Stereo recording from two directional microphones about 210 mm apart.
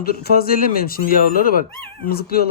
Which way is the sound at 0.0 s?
45° left (ahead or behind).